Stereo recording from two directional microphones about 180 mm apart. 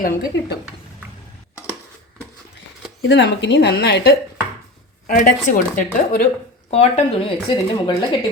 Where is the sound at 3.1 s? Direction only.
75° left (ahead or behind).